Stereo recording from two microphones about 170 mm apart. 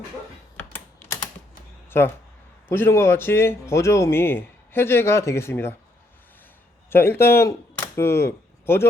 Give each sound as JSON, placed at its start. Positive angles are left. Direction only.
{"t": 0.5, "sound": "typing", "side_deg": 10}
{"t": 2.6, "sound": "speech", "side_deg": 15}
{"t": 6.9, "sound": "speech", "side_deg": 15}